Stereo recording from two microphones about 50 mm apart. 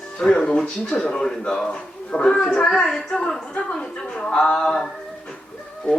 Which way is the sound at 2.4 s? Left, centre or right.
Left.